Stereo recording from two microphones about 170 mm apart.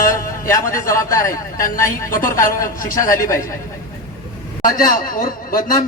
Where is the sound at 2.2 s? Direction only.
55° left (ahead or behind).